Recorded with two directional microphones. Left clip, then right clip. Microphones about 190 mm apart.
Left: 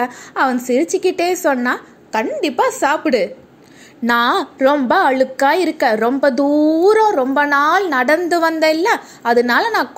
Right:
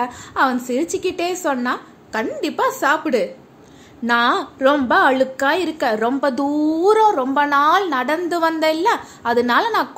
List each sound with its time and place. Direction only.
0.0 s a woman's voice: 15° left (ahead or behind)